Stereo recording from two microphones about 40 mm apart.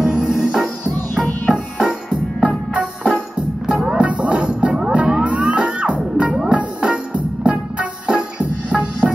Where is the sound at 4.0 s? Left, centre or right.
Right.